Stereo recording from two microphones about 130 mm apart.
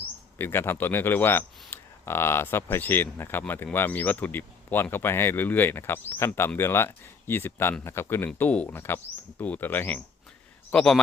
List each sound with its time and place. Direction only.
0.3 s a man's voice: 15° left (ahead or behind)